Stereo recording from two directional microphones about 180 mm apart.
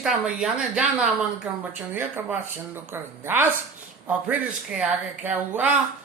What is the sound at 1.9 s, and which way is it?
Music, 10° right (ahead or behind).